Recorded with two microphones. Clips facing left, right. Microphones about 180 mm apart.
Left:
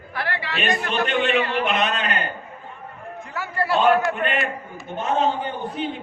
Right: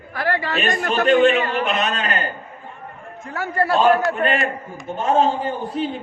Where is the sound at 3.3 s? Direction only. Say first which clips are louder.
Right 3 dB; 45° right (ahead or behind).